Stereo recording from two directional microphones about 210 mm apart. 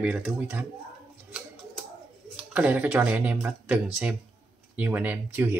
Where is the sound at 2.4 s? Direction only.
5° right (ahead or behind).